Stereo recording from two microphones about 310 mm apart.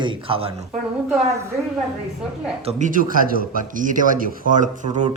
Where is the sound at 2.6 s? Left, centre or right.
Right.